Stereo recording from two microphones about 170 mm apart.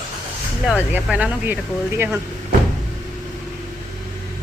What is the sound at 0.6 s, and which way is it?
Speech, 10° right (ahead or behind).